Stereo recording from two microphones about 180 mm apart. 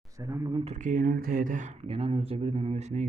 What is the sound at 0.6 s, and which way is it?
Speech, 40° right (ahead or behind).